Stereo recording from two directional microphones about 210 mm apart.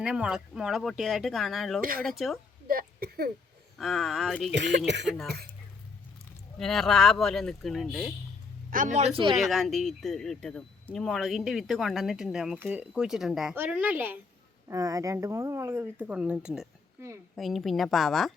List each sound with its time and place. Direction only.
0.0 s speech: 5° right (ahead or behind)
1.8 s speech: 45° right (ahead or behind)
2.0 s speech: centre (ahead or behind)
2.6 s a sound: 45° right (ahead or behind)
3.8 s speech: centre (ahead or behind)
4.5 s speech: 55° right (ahead or behind)
5.0 s speech: centre (ahead or behind)
6.6 s speech: centre (ahead or behind)
8.7 s a man's voice: 35° right (ahead or behind)
9.3 s speech: centre (ahead or behind)